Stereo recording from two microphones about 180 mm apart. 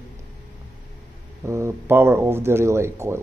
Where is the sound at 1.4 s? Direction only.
15° right (ahead or behind).